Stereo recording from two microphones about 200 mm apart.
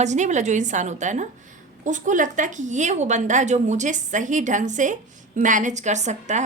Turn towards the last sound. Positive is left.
turn(degrees=-35)  # may be behind; listen again after turning